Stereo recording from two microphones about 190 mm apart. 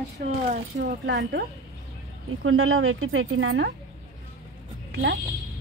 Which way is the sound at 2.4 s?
90° right.